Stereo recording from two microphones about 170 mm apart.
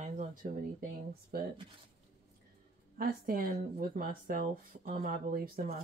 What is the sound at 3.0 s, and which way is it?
Speech, 60° right (ahead or behind).